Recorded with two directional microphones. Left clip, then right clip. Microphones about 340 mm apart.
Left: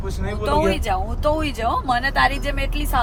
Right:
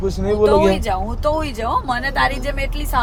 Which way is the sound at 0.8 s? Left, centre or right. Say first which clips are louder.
Right 2 dB; centre.